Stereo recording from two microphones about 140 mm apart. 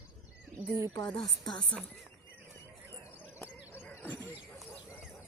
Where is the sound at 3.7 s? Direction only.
15° left (ahead or behind).